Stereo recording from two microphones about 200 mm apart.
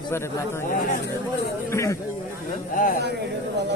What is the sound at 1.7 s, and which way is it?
Speech, 15° left (ahead or behind).